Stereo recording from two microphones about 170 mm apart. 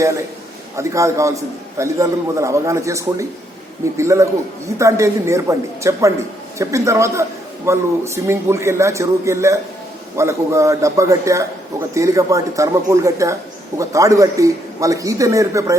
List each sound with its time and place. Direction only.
0.0 s a man's voice: 20° right (ahead or behind)